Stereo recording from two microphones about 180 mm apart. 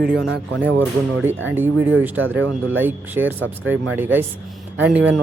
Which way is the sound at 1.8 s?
90° right.